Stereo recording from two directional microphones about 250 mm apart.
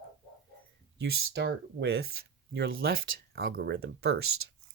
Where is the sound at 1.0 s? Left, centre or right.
Right.